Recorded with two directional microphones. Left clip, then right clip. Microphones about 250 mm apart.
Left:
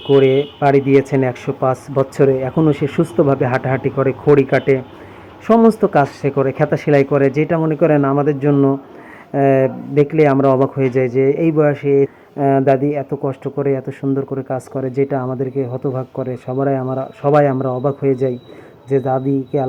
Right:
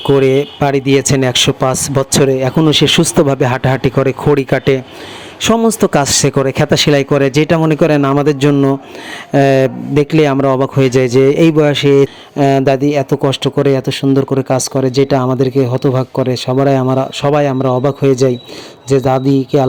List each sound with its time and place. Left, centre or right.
0.1 s a man's voice: right
5.5 s a man's voice: right
5.8 s a man's voice: right